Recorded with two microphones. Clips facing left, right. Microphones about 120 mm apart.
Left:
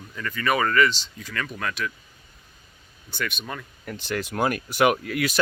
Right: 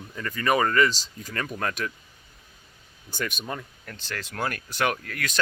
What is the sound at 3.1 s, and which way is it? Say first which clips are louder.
Speech: left 1 dB; 40° right (ahead or behind).